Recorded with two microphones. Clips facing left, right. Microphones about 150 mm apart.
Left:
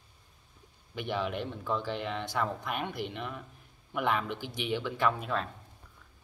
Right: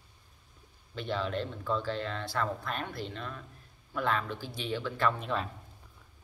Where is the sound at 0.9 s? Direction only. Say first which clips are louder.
Even; 15° left (ahead or behind).